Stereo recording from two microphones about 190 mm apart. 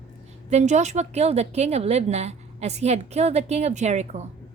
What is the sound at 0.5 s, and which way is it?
A woman's voice, 35° right (ahead or behind).